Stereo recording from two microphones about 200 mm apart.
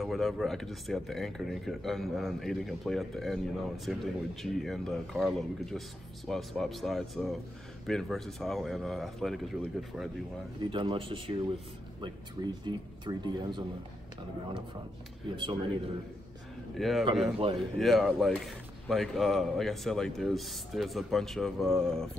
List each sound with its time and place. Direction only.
0.0 s speech: centre (ahead or behind)
10.6 s speech: 25° right (ahead or behind)
12.6 s speech: 20° right (ahead or behind)
15.3 s speech: 25° right (ahead or behind)
16.7 s speech: centre (ahead or behind)